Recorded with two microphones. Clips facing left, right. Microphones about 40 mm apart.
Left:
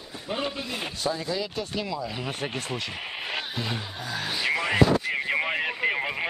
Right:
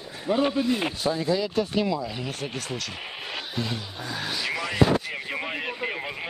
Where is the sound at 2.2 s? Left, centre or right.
Left.